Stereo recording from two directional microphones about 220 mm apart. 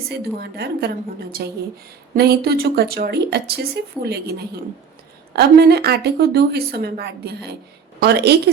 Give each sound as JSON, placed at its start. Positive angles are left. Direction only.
{"t": 0.1, "sound": "speech", "side_deg": -50}
{"t": 2.1, "sound": "speech", "side_deg": -45}